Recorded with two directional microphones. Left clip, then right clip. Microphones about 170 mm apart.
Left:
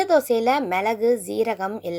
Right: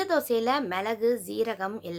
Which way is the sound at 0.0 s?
15° left (ahead or behind).